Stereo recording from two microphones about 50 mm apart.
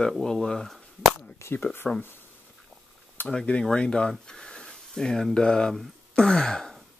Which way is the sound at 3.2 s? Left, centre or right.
Left.